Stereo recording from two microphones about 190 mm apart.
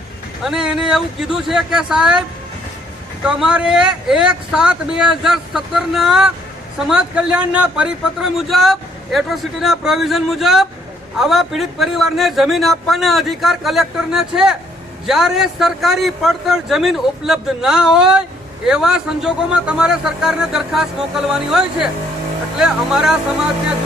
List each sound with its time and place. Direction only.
0.4 s a man's voice: 5° right (ahead or behind)
3.2 s a man's voice: 5° right (ahead or behind)